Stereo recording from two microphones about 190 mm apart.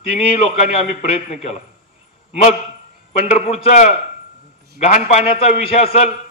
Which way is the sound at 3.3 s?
35° left (ahead or behind).